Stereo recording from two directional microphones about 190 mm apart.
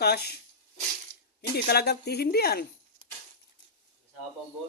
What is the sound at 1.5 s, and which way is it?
Speech, 55° left (ahead or behind).